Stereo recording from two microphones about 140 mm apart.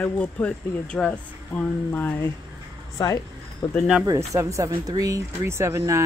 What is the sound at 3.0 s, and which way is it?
Speech, 25° left (ahead or behind).